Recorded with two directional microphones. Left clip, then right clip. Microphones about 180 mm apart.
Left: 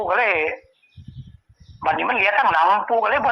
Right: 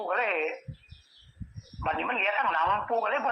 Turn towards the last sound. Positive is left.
turn(degrees=45)  # may be behind; listen again after turning